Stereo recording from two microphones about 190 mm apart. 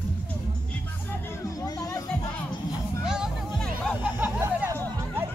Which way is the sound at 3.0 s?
5° right (ahead or behind).